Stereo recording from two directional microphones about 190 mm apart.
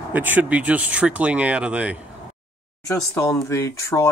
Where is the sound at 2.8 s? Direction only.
15° left (ahead or behind).